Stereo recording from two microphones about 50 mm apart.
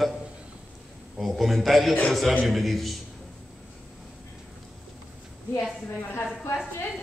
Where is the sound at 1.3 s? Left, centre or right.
Centre.